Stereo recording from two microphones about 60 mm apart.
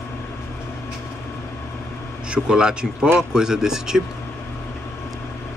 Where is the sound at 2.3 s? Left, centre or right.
Centre.